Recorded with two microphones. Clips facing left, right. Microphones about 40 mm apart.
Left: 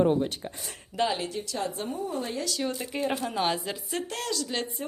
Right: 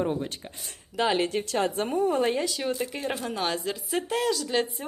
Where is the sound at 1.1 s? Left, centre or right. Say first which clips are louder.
Right 6 dB; right.